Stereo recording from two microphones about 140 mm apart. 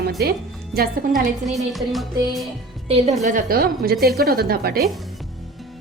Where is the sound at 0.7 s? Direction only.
90° right.